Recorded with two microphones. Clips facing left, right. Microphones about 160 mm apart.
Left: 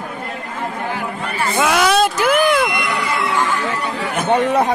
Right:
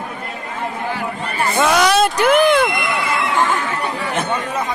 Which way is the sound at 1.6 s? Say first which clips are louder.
Right 1 dB; 5° left (ahead or behind).